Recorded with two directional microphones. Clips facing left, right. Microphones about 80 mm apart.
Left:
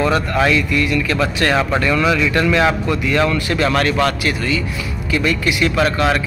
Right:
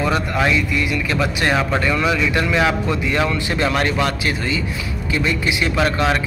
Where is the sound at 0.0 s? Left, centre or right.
Centre.